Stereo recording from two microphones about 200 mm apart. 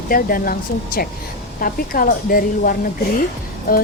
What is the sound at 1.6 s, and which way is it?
Speech, 45° left (ahead or behind).